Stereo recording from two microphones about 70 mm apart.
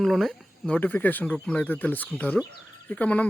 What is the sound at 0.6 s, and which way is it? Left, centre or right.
Speech, left.